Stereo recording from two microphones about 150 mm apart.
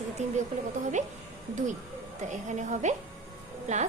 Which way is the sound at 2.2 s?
50° right (ahead or behind).